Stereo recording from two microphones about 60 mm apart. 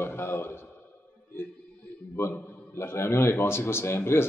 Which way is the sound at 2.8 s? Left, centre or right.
Left.